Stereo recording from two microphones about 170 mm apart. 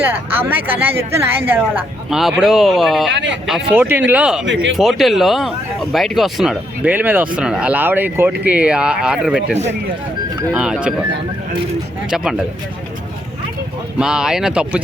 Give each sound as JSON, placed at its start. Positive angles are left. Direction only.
{"t": 0.0, "sound": "a woman's voice", "side_deg": -10}
{"t": 3.1, "sound": "speech", "side_deg": -90}
{"t": 3.4, "sound": "a woman's voice", "side_deg": -5}
{"t": 12.1, "sound": "speech", "side_deg": 0}
{"t": 14.0, "sound": "speech", "side_deg": -5}